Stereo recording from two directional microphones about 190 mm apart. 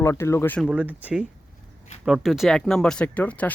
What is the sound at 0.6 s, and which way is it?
Speech, 10° right (ahead or behind).